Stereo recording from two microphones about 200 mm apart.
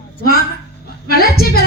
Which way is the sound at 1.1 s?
50° left (ahead or behind).